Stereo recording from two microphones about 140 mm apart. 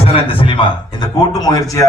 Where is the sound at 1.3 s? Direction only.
25° left (ahead or behind).